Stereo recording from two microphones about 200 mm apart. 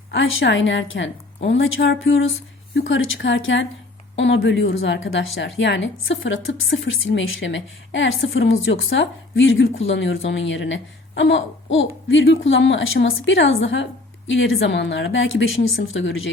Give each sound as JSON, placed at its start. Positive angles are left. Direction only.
{"t": 0.1, "sound": "a woman's voice", "side_deg": 70}
{"t": 4.1, "sound": "a woman's voice", "side_deg": 60}